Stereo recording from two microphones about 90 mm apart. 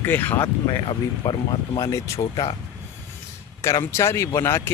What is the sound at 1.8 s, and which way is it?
Speech, 35° left (ahead or behind).